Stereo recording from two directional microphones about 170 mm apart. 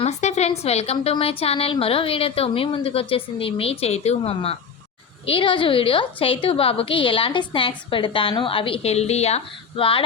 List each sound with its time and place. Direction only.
0.0 s a woman's voice: 40° left (ahead or behind)